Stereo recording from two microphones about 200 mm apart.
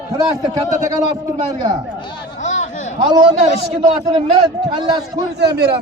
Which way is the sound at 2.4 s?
35° left (ahead or behind).